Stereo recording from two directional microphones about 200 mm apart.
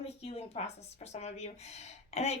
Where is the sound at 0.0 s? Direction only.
30° left (ahead or behind).